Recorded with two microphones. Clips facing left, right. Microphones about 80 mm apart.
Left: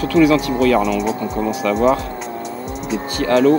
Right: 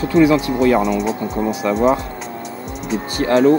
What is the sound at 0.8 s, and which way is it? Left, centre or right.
Speech, centre.